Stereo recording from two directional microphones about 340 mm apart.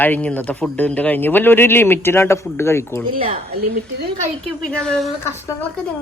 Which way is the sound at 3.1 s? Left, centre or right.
Centre.